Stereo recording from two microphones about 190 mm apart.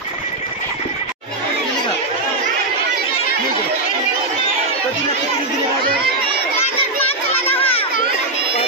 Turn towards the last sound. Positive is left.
turn(degrees=30)  # may be behind; listen again after turning